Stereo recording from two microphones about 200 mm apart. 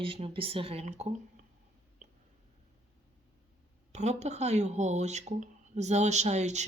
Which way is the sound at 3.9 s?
35° right (ahead or behind).